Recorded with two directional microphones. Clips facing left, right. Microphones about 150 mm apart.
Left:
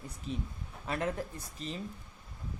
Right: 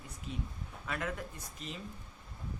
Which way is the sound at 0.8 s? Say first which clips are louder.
Left 4 dB; 35° left (ahead or behind).